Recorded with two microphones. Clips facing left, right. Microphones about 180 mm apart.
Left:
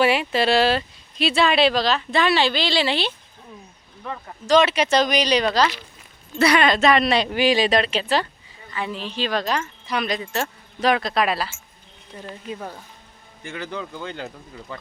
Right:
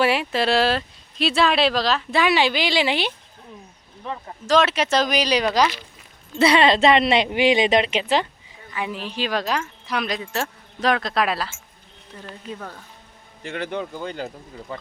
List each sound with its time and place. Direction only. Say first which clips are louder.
0.0 s speech: left 1 dB; centre (ahead or behind)
2.2 s a woman's voice: right 1 dB; 15° right (ahead or behind)
4.4 s speech: left 2 dB; centre (ahead or behind)
6.4 s a woman's voice: right 1 dB; 25° right (ahead or behind); by 11.5 s centre (ahead or behind)
12.1 s speech: left 2 dB; 15° left (ahead or behind)
13.6 s a woman's voice: right 4 dB; 25° right (ahead or behind)
13.9 s a woman's voice: right 2 dB; 10° right (ahead or behind)